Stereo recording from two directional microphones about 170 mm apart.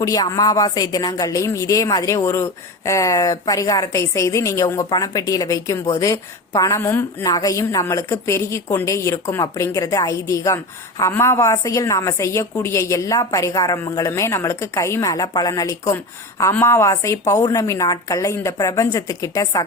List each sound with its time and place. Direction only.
0.0 s a woman's voice: 20° left (ahead or behind)